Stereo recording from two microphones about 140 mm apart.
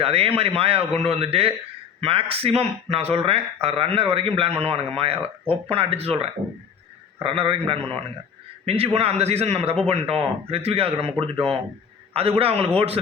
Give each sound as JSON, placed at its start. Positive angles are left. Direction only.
{"t": 0.0, "sound": "a man's voice", "side_deg": -45}
{"t": 12.1, "sound": "speech", "side_deg": -45}